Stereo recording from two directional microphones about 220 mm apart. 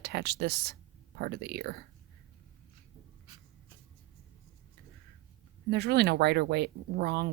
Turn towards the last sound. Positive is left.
turn(degrees=-50)  # may be behind; listen again after turning